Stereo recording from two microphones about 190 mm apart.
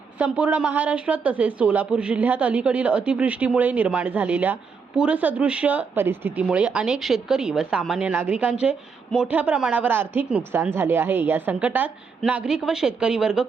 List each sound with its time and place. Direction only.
0.2 s speech: 5° right (ahead or behind)